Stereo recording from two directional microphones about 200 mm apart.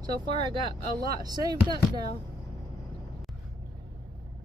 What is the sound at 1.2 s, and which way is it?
Speech, 20° right (ahead or behind).